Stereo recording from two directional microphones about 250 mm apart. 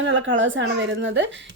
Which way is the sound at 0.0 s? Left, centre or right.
Right.